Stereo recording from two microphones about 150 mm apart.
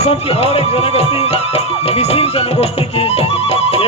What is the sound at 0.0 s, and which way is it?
Speech, 45° left (ahead or behind).